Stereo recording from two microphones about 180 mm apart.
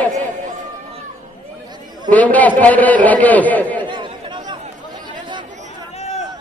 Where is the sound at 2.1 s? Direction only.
10° left (ahead or behind).